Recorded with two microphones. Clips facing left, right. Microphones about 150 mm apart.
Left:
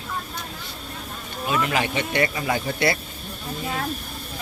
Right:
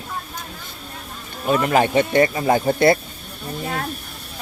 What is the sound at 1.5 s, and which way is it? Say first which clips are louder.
Speech: right 7 dB; 45° right (ahead or behind).